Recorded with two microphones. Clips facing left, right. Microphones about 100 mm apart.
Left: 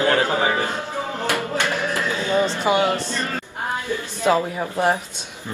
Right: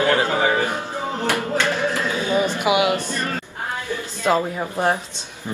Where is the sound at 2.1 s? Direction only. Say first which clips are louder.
Left 2 dB; 15° right (ahead or behind).